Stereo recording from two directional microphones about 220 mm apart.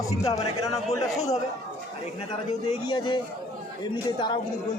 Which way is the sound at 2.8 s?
20° left (ahead or behind).